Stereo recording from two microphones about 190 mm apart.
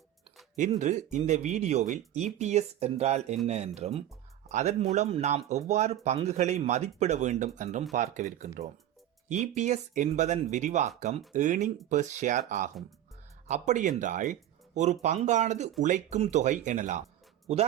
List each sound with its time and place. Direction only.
0.5 s speech: 40° right (ahead or behind)